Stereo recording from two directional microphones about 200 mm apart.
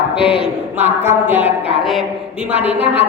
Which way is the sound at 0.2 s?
25° left (ahead or behind).